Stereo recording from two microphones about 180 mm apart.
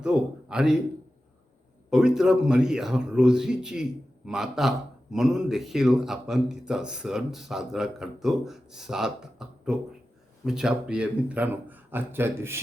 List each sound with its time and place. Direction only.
0.0 s a man's voice: 5° right (ahead or behind)
1.9 s a man's voice: 5° right (ahead or behind)